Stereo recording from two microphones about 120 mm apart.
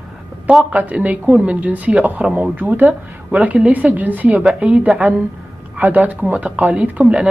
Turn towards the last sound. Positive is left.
turn(degrees=-10)  # may be behind; listen again after turning